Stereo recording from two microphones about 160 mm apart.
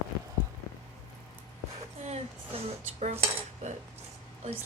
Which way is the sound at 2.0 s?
40° right (ahead or behind).